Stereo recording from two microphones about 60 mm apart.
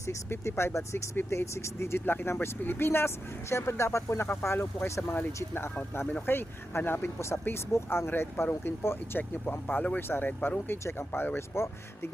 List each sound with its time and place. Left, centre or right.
0.3 s speech: left
8.1 s speech: left